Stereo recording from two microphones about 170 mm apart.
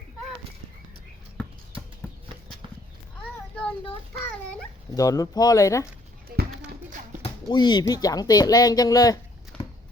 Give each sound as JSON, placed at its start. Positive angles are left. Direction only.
{"t": 3.5, "sound": "child singing", "side_deg": 5}
{"t": 4.9, "sound": "speech", "side_deg": 20}
{"t": 7.2, "sound": "speech", "side_deg": 25}
{"t": 9.5, "sound": "a sound", "side_deg": 5}